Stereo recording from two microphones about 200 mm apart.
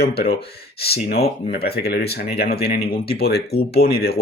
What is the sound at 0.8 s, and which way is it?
Speech, 50° left (ahead or behind).